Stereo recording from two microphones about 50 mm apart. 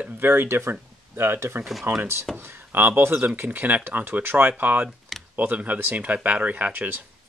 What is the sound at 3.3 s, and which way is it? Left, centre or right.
Speech, right.